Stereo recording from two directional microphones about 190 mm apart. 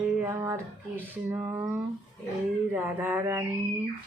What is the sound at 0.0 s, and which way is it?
Music, 10° right (ahead or behind).